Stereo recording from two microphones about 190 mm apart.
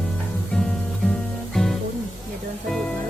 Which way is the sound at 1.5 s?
Centre (ahead or behind).